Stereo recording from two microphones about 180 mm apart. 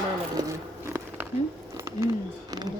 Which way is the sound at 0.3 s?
20° right (ahead or behind).